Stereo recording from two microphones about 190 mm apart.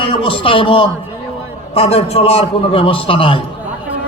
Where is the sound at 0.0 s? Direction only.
30° left (ahead or behind).